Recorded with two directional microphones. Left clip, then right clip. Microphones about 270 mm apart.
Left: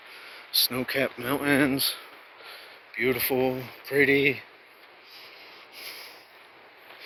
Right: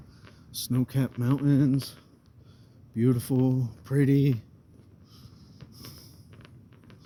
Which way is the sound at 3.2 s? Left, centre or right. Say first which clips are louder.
Left 3 dB; right.